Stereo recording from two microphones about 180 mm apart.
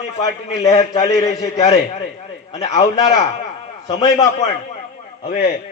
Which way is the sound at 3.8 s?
20° left (ahead or behind).